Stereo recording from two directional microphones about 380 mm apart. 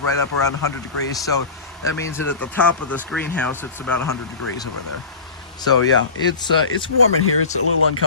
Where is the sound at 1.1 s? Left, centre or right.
Centre.